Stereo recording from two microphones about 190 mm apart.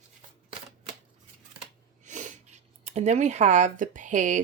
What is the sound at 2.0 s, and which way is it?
Speech, 40° right (ahead or behind).